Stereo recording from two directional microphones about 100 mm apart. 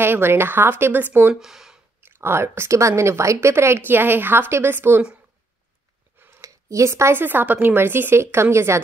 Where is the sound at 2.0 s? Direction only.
25° right (ahead or behind).